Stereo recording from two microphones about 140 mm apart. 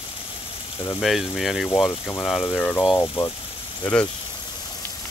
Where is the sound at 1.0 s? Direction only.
Centre (ahead or behind).